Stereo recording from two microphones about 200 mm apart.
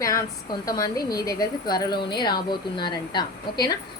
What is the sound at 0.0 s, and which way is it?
A woman's voice, 15° left (ahead or behind).